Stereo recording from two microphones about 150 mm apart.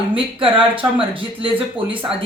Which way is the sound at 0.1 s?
35° right (ahead or behind).